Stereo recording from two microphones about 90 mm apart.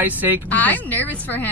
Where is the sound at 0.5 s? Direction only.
20° left (ahead or behind).